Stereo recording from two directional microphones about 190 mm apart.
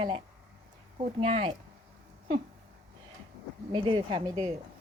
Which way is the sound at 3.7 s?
25° right (ahead or behind).